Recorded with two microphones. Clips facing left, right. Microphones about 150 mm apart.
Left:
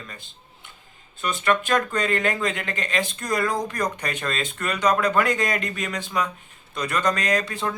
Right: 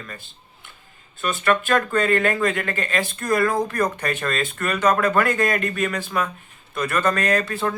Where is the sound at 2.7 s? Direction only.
50° right (ahead or behind).